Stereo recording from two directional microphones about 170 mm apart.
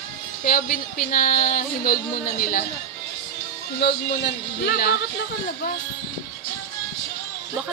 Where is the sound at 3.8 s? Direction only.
75° left (ahead or behind).